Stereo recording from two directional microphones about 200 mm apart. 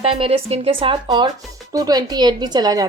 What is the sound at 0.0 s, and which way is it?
A woman's voice, 30° right (ahead or behind).